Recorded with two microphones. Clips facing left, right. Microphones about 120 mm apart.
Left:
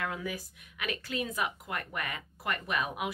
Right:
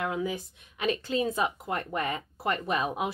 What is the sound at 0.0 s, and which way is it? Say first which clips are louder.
Speech: right 5 dB; 20° right (ahead or behind).